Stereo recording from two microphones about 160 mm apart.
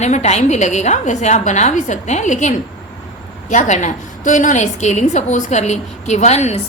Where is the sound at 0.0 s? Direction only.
45° left (ahead or behind).